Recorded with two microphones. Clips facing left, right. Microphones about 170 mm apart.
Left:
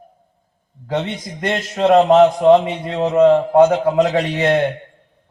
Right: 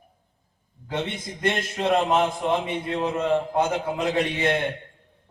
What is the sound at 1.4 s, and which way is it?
A man's voice, 65° left (ahead or behind).